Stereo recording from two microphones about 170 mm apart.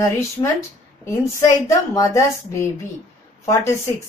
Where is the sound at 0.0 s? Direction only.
20° left (ahead or behind).